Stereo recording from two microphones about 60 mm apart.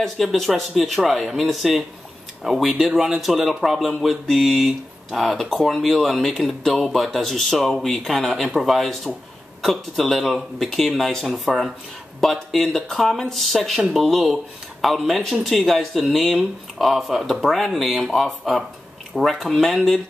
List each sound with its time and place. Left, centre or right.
0.0 s speech: centre